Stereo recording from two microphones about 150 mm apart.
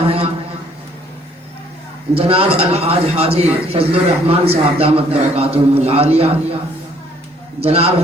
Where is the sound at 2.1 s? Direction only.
40° right (ahead or behind).